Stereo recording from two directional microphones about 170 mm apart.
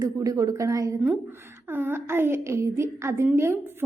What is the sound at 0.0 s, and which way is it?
A woman's voice, 20° right (ahead or behind).